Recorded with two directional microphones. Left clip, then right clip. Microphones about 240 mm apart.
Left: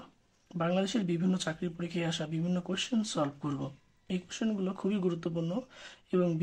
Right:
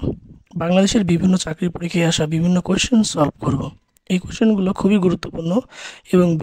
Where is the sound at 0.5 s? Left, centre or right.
Right.